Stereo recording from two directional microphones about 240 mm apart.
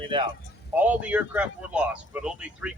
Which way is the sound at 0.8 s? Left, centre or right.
Centre.